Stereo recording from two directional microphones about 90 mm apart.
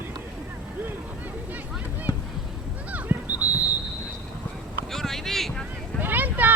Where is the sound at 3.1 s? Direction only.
20° right (ahead or behind).